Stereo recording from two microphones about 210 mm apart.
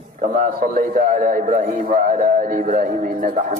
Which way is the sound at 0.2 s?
40° right (ahead or behind).